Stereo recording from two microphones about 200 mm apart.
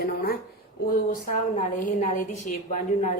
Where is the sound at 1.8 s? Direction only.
40° left (ahead or behind).